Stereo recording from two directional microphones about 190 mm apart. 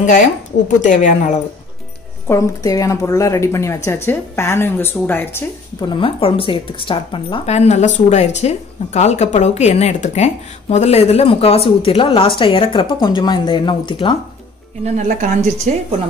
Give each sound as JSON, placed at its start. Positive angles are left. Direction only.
{"t": 0.0, "sound": "a woman's voice", "side_deg": 40}
{"t": 2.2, "sound": "speech", "side_deg": 15}
{"t": 5.8, "sound": "speech", "side_deg": 25}
{"t": 15.0, "sound": "a woman's voice", "side_deg": -40}